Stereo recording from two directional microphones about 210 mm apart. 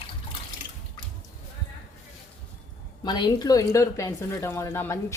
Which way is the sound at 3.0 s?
20° left (ahead or behind).